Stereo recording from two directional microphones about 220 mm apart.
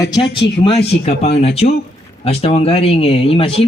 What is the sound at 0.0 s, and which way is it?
A man's voice, 20° left (ahead or behind).